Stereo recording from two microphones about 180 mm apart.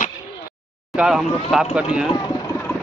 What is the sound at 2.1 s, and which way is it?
Speech, 25° left (ahead or behind).